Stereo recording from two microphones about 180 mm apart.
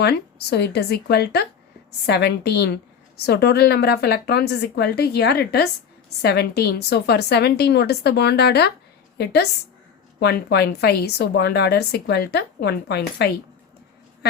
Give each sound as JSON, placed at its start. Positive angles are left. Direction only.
{"t": 0.0, "sound": "a woman's voice", "side_deg": 65}